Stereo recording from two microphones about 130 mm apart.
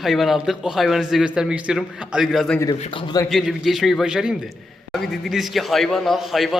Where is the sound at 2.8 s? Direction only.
45° left (ahead or behind).